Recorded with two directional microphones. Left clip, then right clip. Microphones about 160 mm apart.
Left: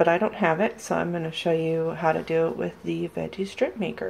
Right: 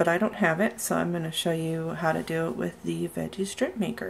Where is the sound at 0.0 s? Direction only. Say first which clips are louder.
Left 3 dB; 15° right (ahead or behind).